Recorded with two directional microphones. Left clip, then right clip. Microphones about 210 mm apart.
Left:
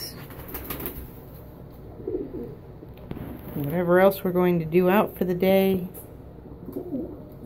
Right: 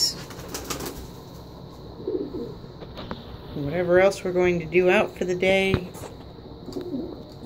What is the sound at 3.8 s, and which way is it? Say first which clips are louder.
Speech: even; 20° left (ahead or behind).